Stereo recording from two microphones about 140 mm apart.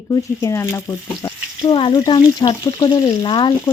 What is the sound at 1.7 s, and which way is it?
A woman's voice, 40° left (ahead or behind).